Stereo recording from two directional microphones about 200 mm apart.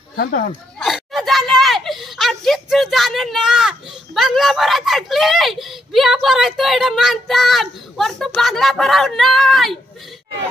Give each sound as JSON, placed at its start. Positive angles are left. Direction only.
{"t": 0.2, "sound": "speech", "side_deg": 45}
{"t": 0.7, "sound": "speech", "side_deg": 0}